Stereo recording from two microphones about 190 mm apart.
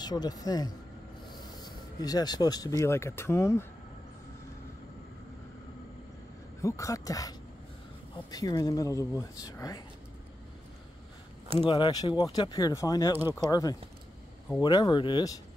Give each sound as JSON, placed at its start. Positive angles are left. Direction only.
{"t": 0.0, "sound": "speech", "side_deg": 20}
{"t": 6.6, "sound": "speech", "side_deg": 15}
{"t": 11.6, "sound": "speech", "side_deg": 25}